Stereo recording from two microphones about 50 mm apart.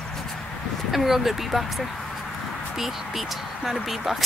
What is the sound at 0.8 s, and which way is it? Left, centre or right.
Speech, centre.